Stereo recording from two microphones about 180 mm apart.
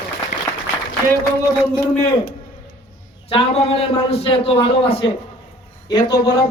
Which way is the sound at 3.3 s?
30° left (ahead or behind).